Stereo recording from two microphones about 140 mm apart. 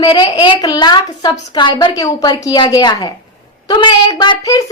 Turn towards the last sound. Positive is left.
turn(degrees=30)  # may be behind; listen again after turning